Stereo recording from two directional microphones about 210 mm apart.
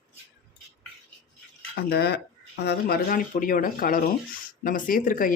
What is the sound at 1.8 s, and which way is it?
A woman's voice, 50° left (ahead or behind).